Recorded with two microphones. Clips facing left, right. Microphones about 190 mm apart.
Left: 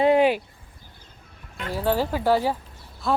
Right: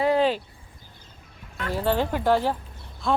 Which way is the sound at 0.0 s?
15° left (ahead or behind).